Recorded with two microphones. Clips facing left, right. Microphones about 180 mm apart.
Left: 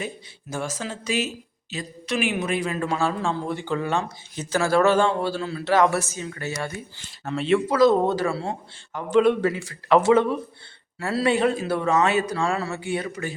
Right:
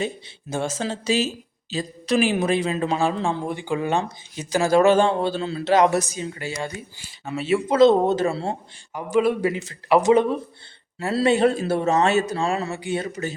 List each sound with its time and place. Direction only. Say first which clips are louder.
0.5 s speech: right 4 dB; 25° right (ahead or behind)
7.3 s speech: left 1 dB; 5° right (ahead or behind)
7.7 s speech: right 5 dB; 25° right (ahead or behind)
8.9 s speech: left 2 dB; 10° right (ahead or behind)
13.0 s speech: right 2 dB; 30° right (ahead or behind)